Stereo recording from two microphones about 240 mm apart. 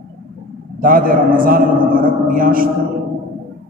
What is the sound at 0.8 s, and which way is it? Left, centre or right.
A man's voice, right.